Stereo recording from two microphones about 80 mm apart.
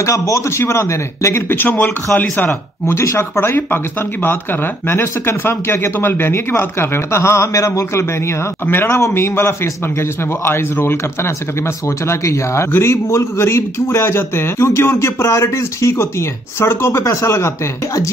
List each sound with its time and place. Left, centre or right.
0.0 s speech: left
1.6 s speech: left
2.9 s speech: left
8.6 s speech: left